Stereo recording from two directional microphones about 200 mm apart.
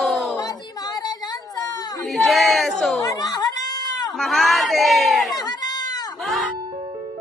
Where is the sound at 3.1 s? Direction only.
20° left (ahead or behind).